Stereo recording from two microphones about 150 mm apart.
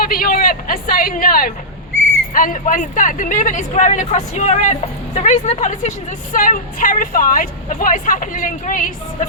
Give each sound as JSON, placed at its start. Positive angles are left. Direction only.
{"t": 0.0, "sound": "a woman's voice", "side_deg": 75}